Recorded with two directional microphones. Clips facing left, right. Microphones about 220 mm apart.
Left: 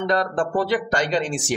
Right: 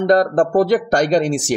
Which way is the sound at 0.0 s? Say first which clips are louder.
Right 8 dB; 45° right (ahead or behind).